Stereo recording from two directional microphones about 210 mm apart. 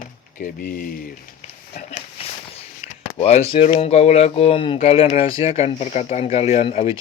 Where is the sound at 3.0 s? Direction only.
30° left (ahead or behind).